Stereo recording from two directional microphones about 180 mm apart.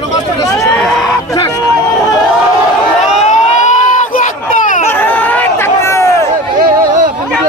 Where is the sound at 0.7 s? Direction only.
5° left (ahead or behind).